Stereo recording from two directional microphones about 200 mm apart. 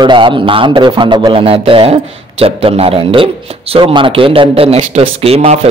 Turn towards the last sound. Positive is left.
turn(degrees=-30)  # may be behind; listen again after turning